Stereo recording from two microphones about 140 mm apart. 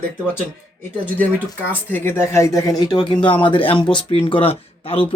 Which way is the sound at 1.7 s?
15° left (ahead or behind).